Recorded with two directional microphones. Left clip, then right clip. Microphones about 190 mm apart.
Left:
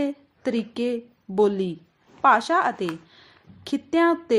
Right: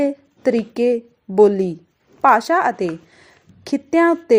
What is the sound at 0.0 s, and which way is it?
A woman's voice, 20° right (ahead or behind).